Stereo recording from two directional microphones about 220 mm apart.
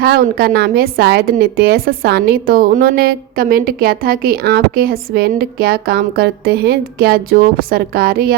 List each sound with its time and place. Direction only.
0.0 s a woman's voice: 45° right (ahead or behind)